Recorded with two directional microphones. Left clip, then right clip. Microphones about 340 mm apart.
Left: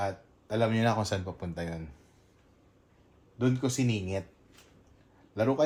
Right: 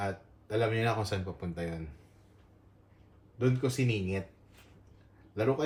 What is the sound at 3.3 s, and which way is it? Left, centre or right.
Speech, left.